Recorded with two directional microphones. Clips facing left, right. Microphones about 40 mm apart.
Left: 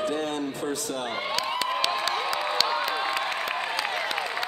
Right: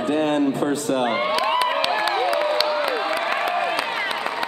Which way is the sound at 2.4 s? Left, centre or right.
Centre.